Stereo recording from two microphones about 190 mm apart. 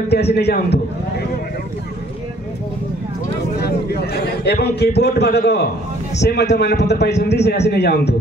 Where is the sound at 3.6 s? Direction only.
55° left (ahead or behind).